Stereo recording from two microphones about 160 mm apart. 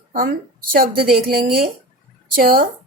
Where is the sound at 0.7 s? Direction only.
65° right (ahead or behind).